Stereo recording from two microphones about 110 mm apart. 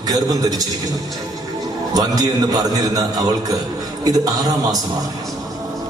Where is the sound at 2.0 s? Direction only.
35° right (ahead or behind).